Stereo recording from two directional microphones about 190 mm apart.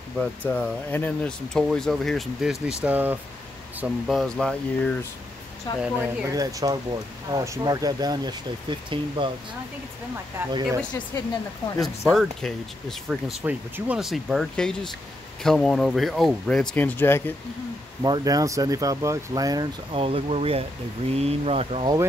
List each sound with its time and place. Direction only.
0.2 s speech: 5° left (ahead or behind)
5.8 s speech: 15° right (ahead or behind)
11.8 s speech: centre (ahead or behind)
13.4 s speech: 10° right (ahead or behind); by 17.2 s 10° left (ahead or behind)
18.0 s speech: 20° right (ahead or behind)